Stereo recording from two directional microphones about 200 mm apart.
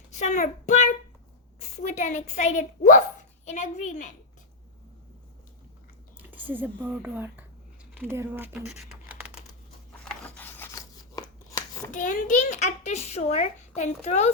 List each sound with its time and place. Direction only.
0.2 s a child's voice: 40° left (ahead or behind)
6.1 s speech: 10° right (ahead or behind)
10.1 s scissors: 5° left (ahead or behind)
11.9 s a child's voice: 40° left (ahead or behind)